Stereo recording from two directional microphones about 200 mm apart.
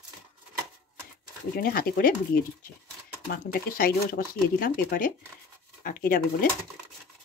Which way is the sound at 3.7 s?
45° left (ahead or behind).